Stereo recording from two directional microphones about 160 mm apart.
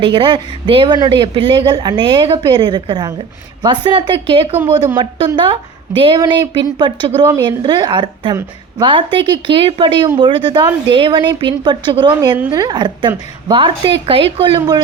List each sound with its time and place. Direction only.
0.0 s a woman's voice: 30° right (ahead or behind)